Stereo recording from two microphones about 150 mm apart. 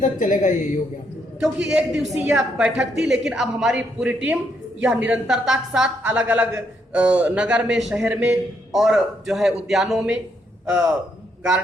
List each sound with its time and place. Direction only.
0.0 s speech: 60° left (ahead or behind)
1.4 s a woman's voice: 5° right (ahead or behind)